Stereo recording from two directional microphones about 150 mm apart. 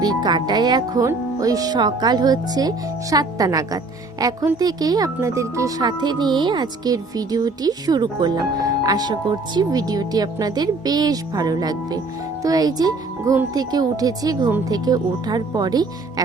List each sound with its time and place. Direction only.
0.0 s speech: 25° right (ahead or behind)